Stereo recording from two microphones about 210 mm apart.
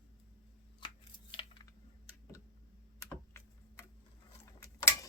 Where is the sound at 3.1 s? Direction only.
10° left (ahead or behind).